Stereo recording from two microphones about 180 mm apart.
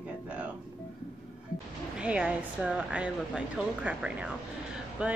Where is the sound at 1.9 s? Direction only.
5° right (ahead or behind).